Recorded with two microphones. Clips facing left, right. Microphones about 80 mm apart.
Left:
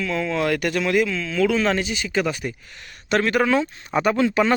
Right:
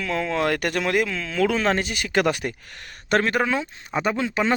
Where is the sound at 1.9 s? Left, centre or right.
Right.